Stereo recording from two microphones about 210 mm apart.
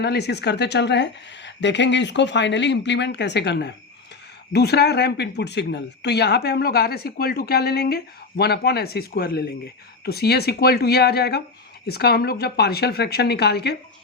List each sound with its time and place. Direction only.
0.0 s a woman's voice: 50° left (ahead or behind)